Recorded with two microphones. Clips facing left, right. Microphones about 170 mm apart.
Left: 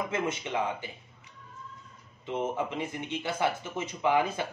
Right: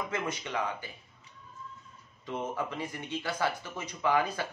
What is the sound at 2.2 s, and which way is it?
Speech, 25° left (ahead or behind).